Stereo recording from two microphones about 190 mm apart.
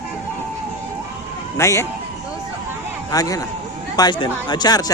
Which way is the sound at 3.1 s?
20° left (ahead or behind).